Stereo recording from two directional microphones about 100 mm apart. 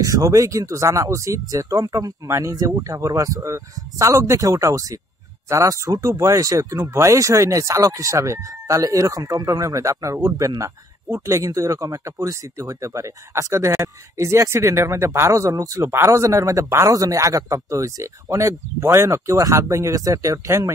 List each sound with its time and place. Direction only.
0.0 s speech: 35° right (ahead or behind)